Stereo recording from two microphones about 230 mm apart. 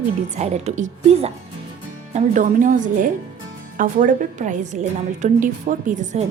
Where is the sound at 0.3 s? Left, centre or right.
Right.